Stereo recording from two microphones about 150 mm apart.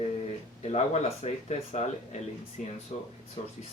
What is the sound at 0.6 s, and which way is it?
Speech, 45° left (ahead or behind).